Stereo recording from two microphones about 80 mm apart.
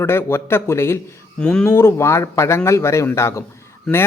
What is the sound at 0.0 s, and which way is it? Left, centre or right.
Speech, left.